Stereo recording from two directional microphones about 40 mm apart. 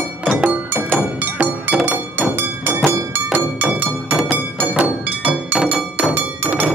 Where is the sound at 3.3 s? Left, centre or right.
Right.